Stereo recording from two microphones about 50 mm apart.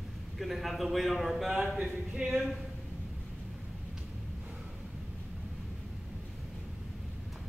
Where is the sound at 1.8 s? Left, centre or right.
Centre.